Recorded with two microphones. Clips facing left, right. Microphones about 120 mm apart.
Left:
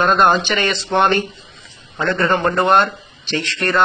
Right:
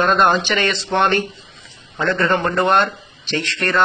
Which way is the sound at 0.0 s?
5° left (ahead or behind).